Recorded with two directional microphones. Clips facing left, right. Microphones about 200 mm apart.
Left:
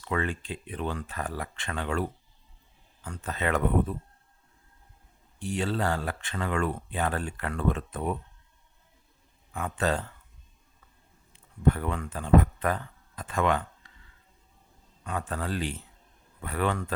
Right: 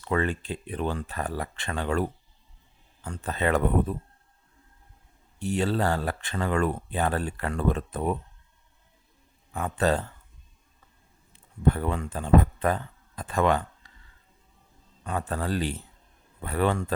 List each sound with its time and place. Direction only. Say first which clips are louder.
0.0 s speech: right 4 dB; 40° right (ahead or behind)
5.4 s speech: right 3 dB; 40° right (ahead or behind)
9.5 s speech: right 3 dB; 35° right (ahead or behind)
11.7 s speech: right 3 dB; 30° right (ahead or behind)
15.0 s speech: right 3 dB; 35° right (ahead or behind)